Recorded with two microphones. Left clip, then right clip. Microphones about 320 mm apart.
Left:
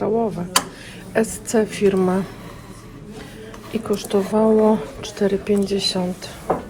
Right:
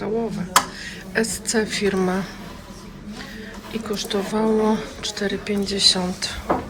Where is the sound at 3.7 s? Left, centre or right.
Centre.